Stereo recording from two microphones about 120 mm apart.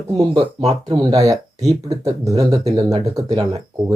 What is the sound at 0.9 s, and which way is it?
Speech, 30° right (ahead or behind).